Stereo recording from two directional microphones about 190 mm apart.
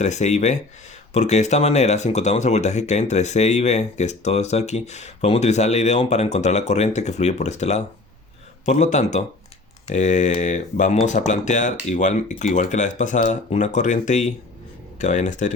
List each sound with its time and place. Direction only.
0.0 s speech: 35° left (ahead or behind)